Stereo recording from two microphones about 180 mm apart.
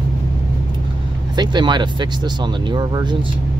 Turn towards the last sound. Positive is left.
turn(degrees=-25)  # may be behind; listen again after turning